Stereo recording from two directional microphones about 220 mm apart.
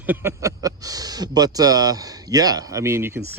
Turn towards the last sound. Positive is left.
turn(degrees=-10)  # may be behind; listen again after turning